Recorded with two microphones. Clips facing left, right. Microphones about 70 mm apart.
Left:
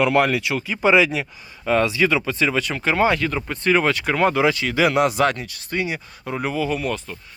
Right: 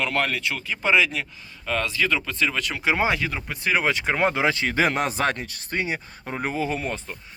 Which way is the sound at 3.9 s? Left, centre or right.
Right.